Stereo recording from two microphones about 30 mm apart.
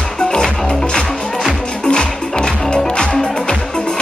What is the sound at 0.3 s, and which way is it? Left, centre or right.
Music, left.